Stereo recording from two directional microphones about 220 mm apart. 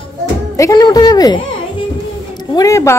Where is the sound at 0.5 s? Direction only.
15° left (ahead or behind).